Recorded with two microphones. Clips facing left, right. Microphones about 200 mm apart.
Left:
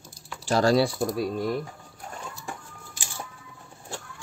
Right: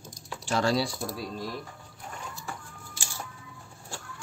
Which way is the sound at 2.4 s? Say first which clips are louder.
Left 2 dB; 15° left (ahead or behind).